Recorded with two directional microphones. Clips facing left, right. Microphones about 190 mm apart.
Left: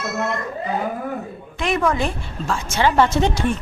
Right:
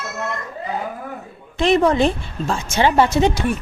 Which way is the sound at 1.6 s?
30° right (ahead or behind).